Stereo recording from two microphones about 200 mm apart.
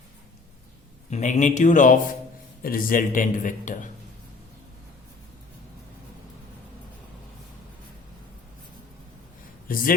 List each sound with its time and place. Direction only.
1.1 s a man's voice: 35° left (ahead or behind)
9.6 s speech: 45° left (ahead or behind)